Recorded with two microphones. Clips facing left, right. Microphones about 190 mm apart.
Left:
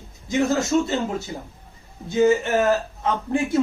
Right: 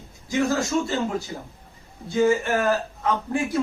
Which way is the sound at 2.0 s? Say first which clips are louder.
Left 2 dB; 20° left (ahead or behind).